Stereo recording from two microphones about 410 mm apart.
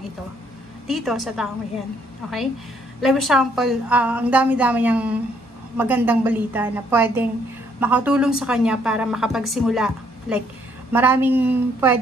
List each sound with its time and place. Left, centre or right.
0.8 s a woman's voice: centre
3.0 s a woman's voice: centre